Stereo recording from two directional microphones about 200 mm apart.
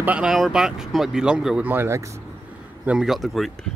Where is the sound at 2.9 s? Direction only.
Centre (ahead or behind).